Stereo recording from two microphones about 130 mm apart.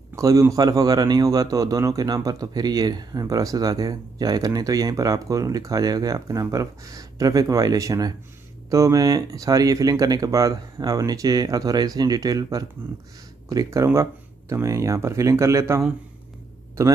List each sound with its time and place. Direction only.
0.1 s a man's voice: 25° right (ahead or behind)